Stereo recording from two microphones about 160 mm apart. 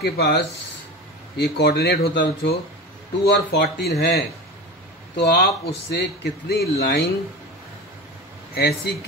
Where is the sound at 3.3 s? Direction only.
90° left.